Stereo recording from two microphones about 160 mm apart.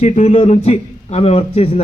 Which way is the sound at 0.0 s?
40° left (ahead or behind).